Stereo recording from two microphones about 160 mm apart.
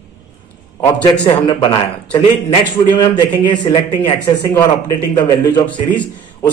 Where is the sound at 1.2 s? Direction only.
30° left (ahead or behind).